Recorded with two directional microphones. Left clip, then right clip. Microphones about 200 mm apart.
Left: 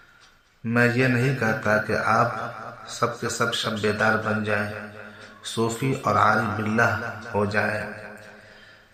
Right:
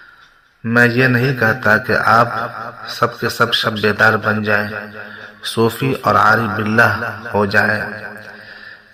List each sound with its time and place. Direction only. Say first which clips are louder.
0.6 s a man's voice: right 9 dB; 25° right (ahead or behind)